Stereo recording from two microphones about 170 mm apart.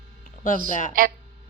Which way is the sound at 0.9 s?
55° right (ahead or behind).